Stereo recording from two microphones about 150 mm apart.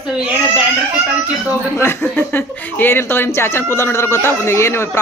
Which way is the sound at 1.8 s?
15° left (ahead or behind).